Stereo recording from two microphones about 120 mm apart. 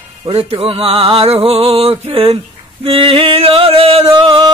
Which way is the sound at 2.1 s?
50° right (ahead or behind).